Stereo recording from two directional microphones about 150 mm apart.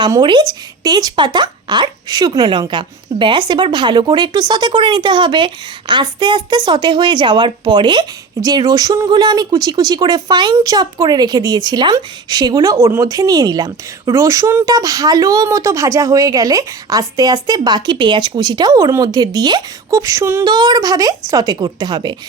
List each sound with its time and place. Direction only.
0.0 s speech: 30° right (ahead or behind)